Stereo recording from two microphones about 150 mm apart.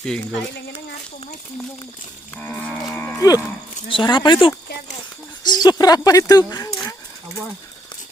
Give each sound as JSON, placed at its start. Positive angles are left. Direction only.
{"t": 2.3, "sound": "cattle", "side_deg": 10}
{"t": 3.2, "sound": "speech", "side_deg": 25}